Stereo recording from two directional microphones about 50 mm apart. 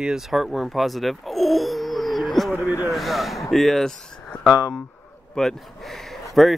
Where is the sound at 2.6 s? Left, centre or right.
Left.